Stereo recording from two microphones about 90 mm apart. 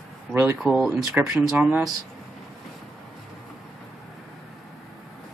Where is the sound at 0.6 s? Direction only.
10° right (ahead or behind).